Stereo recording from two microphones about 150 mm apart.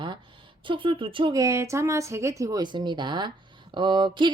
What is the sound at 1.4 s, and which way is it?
A woman's voice, 20° right (ahead or behind).